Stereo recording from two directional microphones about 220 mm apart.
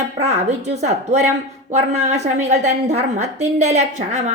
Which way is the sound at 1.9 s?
30° right (ahead or behind).